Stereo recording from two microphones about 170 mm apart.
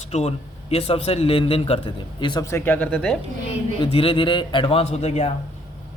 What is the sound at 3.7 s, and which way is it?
A man's voice, 30° left (ahead or behind).